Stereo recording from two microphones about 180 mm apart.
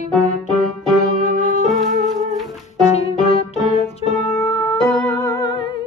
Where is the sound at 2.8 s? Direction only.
35° left (ahead or behind).